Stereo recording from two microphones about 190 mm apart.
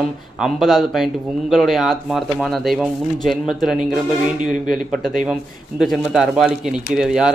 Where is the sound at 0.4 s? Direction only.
Centre (ahead or behind).